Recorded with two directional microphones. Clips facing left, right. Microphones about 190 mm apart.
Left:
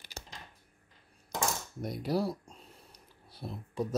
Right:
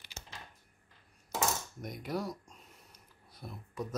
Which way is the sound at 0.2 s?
35° left (ahead or behind).